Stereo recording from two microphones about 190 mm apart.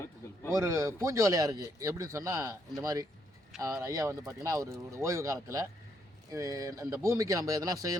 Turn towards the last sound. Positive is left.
turn(degrees=-20)  # may be behind; listen again after turning